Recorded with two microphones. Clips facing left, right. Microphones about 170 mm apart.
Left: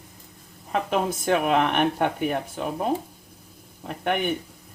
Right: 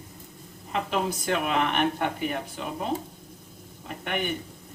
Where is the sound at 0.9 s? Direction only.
50° left (ahead or behind).